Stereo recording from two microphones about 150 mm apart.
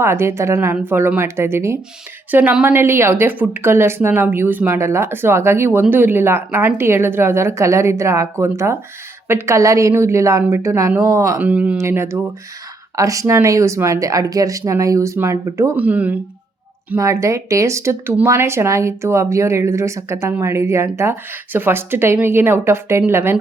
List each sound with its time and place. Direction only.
0.0 s speech: 15° right (ahead or behind)
11.3 s speech: 10° right (ahead or behind)